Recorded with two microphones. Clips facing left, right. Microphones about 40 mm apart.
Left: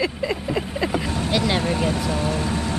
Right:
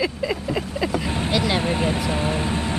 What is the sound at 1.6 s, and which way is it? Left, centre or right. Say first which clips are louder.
Speech: even; right.